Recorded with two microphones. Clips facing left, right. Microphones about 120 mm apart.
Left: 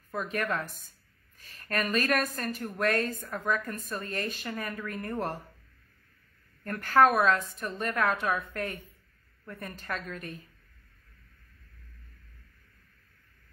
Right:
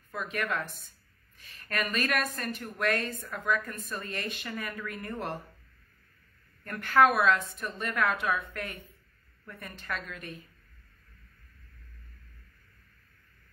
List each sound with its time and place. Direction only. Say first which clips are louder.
0.1 s a woman's voice: left 2 dB; 40° left (ahead or behind)
6.6 s a woman's voice: left 1 dB; 40° left (ahead or behind)